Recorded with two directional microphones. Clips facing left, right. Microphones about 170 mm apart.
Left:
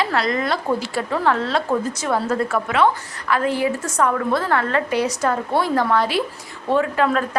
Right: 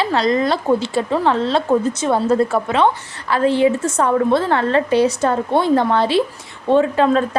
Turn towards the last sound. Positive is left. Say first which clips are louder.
# right 4 dB
turn(degrees=-25)  # may be behind; listen again after turning